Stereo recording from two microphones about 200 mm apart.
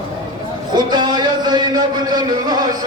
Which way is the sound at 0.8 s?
20° right (ahead or behind).